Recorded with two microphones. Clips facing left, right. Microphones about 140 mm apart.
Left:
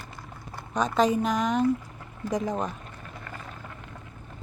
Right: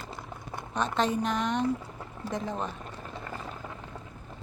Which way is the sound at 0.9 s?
10° left (ahead or behind).